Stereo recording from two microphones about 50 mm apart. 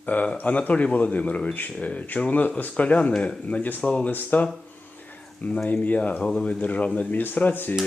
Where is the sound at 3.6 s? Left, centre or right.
Left.